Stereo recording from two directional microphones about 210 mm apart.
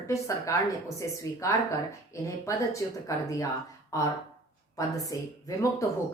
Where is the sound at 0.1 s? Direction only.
15° left (ahead or behind).